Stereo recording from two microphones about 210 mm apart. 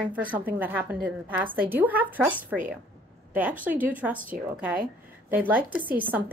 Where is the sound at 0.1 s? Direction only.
5° right (ahead or behind).